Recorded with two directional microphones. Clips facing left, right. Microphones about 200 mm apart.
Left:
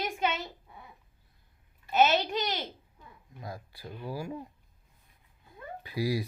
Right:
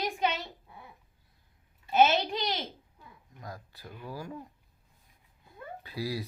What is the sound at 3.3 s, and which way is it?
Speech, 10° left (ahead or behind).